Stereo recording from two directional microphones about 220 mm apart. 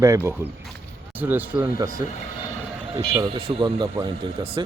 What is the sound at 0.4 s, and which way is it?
Speech, 10° right (ahead or behind).